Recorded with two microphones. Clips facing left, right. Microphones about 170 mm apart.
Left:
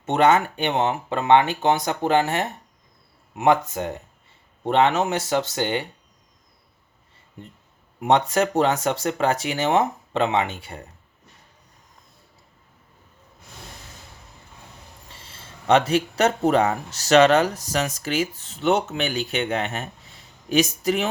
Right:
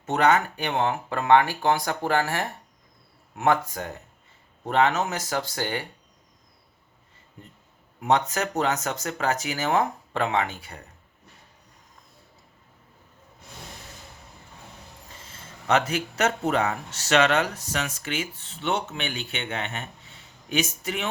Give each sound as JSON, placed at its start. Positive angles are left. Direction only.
{"t": 0.0, "sound": "speech", "side_deg": 25}
{"t": 8.0, "sound": "speech", "side_deg": 30}
{"t": 15.2, "sound": "speech", "side_deg": 30}